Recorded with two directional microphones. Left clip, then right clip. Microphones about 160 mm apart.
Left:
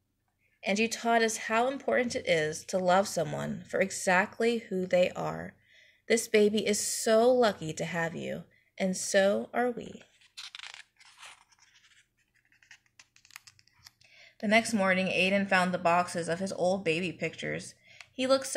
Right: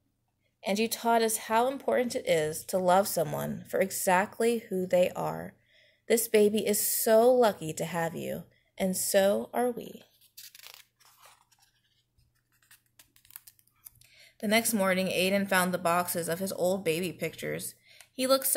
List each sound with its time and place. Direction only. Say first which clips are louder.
0.6 s speech: even; 5° right (ahead or behind)
10.5 s crunch: left 6 dB; 20° left (ahead or behind)
14.0 s speech: even; centre (ahead or behind)